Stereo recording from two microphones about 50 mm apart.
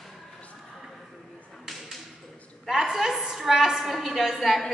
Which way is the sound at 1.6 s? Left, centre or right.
Centre.